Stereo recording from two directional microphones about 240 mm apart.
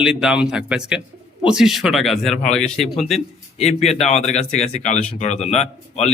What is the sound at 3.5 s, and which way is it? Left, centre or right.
Speech, left.